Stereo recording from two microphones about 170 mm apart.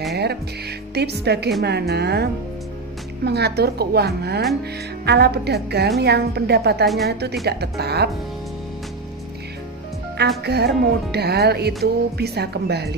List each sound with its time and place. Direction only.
0.1 s music: 70° right (ahead or behind)
3.3 s music: 75° right (ahead or behind)
10.1 s music: 75° right (ahead or behind)